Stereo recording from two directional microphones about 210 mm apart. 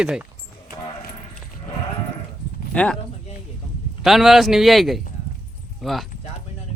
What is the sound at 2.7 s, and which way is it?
Speech, 5° left (ahead or behind).